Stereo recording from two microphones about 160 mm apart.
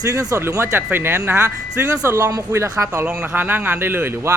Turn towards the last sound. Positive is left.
turn(degrees=-15)  # may be behind; listen again after turning